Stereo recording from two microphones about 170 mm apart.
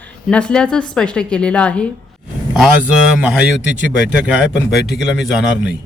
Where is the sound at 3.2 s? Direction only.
5° right (ahead or behind).